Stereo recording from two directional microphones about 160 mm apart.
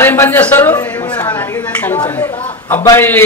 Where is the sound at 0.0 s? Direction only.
15° left (ahead or behind).